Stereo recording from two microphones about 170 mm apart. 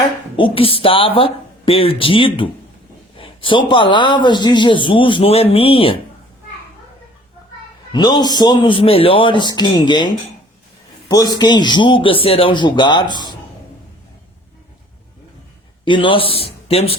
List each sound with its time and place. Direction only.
0.3 s speech: 30° left (ahead or behind)
3.2 s a sound: 30° left (ahead or behind)
3.7 s speech: 30° left (ahead or behind)
7.9 s speech: 25° left (ahead or behind)
11.1 s speech: 20° left (ahead or behind)
15.8 s a man's voice: 30° left (ahead or behind)